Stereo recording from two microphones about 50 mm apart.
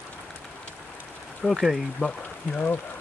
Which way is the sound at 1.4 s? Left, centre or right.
Centre.